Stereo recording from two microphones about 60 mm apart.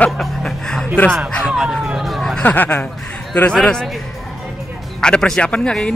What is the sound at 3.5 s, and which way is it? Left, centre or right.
Speech, centre.